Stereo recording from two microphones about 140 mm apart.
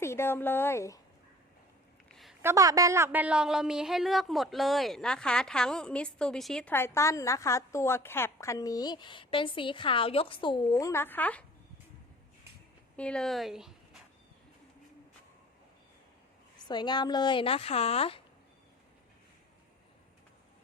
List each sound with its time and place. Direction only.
0.0 s a woman's voice: 20° left (ahead or behind)
2.4 s a woman's voice: 20° right (ahead or behind); by 6.7 s 5° left (ahead or behind)
6.7 s a woman's voice: 20° left (ahead or behind)
13.0 s speech: 5° left (ahead or behind)
16.6 s a woman's voice: 30° left (ahead or behind)